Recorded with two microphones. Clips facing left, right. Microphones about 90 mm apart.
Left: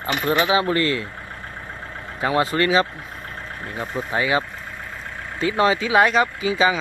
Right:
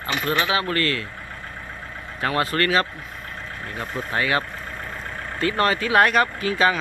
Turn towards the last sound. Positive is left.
turn(degrees=10)  # may be behind; listen again after turning